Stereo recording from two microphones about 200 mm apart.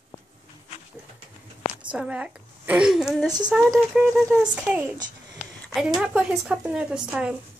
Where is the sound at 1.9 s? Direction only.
5° right (ahead or behind).